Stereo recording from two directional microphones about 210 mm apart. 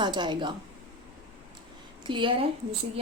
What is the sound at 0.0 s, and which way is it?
Speech, 20° right (ahead or behind).